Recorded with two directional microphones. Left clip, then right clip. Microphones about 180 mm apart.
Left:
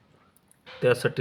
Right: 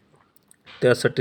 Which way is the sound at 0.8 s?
15° right (ahead or behind).